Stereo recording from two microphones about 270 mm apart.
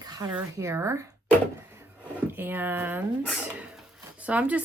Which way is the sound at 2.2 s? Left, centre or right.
Centre.